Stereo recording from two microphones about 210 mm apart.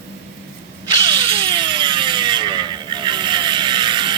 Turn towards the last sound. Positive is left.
turn(degrees=-20)  # may be behind; listen again after turning